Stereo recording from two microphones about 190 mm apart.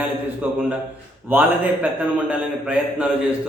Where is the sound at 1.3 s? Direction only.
10° right (ahead or behind).